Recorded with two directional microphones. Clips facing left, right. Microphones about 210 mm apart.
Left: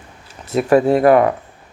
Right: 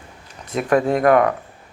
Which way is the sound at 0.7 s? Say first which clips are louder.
Left 4 dB; 30° left (ahead or behind).